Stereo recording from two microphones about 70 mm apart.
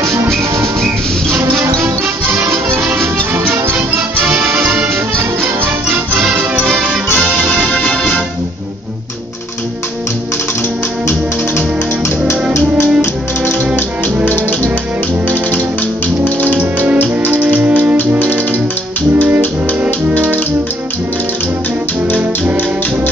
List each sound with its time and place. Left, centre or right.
4.5 s music: centre
5.1 s music: centre
7.2 s music: left
12.5 s music: left
16.5 s music: centre
19.2 s music: right